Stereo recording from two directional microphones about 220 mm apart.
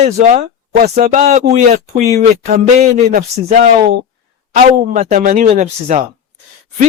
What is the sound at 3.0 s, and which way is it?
Speech, 40° right (ahead or behind).